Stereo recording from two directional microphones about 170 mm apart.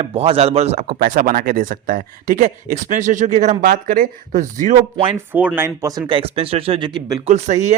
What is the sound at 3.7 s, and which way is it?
Speech, 55° right (ahead or behind).